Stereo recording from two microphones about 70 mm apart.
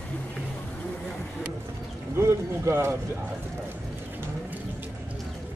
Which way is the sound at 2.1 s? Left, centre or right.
Right.